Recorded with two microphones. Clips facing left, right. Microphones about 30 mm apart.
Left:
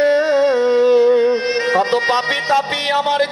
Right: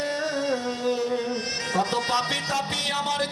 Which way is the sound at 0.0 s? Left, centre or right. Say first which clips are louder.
Left 13 dB; left.